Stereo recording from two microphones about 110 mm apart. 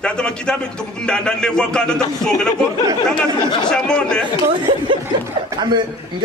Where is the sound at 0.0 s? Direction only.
10° left (ahead or behind).